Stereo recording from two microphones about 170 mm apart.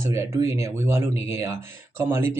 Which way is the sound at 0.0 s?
15° right (ahead or behind).